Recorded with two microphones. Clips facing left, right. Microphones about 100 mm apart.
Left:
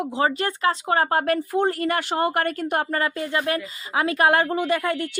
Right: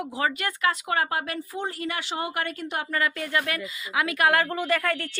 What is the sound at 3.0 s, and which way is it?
A woman's voice, 30° left (ahead or behind).